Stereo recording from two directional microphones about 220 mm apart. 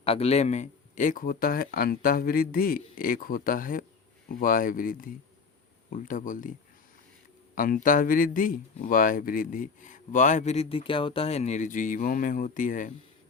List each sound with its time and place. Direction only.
0.0 s speech: 25° left (ahead or behind)
7.5 s speech: 40° left (ahead or behind)